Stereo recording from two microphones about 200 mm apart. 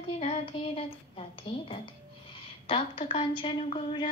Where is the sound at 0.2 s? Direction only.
30° left (ahead or behind).